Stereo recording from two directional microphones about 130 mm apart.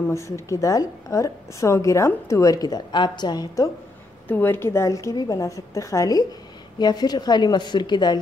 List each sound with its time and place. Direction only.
0.1 s a woman's voice: 25° left (ahead or behind)
4.3 s a woman's voice: 15° left (ahead or behind); by 8.2 s 35° left (ahead or behind)